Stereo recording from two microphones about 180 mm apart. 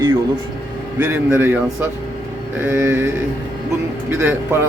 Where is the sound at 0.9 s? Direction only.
15° right (ahead or behind).